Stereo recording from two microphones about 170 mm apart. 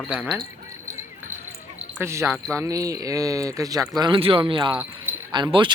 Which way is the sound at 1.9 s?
15° right (ahead or behind).